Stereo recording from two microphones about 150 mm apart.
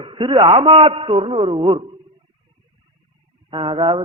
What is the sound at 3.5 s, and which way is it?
Speech, 35° right (ahead or behind).